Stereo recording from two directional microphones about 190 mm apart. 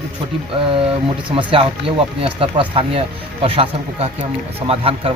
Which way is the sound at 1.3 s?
30° right (ahead or behind).